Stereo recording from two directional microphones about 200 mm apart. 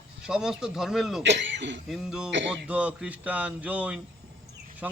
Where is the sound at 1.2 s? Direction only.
65° right (ahead or behind).